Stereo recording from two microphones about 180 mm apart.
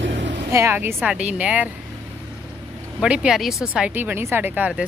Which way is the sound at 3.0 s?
5° right (ahead or behind).